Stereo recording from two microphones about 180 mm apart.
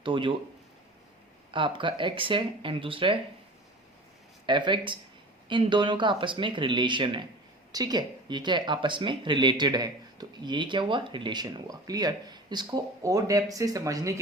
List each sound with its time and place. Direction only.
0.0 s speech: 25° right (ahead or behind)
1.5 s speech: 25° right (ahead or behind)
4.4 s speech: 25° right (ahead or behind)